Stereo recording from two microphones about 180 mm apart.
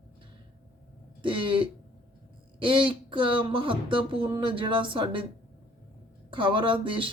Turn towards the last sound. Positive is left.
turn(degrees=-30)  # may be behind; listen again after turning